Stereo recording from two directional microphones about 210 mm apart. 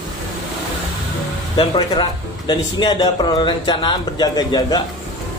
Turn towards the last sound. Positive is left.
turn(degrees=20)  # may be behind; listen again after turning